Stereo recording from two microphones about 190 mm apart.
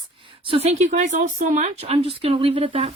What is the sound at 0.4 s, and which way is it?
Speech, 30° right (ahead or behind).